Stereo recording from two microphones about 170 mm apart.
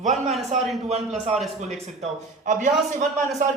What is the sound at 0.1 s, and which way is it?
Speech, centre (ahead or behind).